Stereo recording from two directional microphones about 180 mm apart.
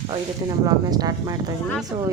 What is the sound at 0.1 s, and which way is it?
A woman's voice, 25° right (ahead or behind).